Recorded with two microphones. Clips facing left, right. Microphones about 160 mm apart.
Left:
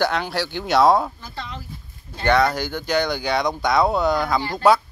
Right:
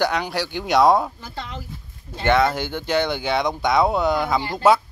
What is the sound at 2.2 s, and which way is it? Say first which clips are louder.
Speech: even; 20° right (ahead or behind).